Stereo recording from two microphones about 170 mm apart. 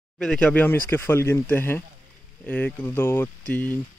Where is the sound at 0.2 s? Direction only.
5° left (ahead or behind).